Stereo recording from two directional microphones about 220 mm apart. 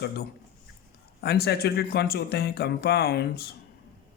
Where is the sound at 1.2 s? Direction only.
45° left (ahead or behind).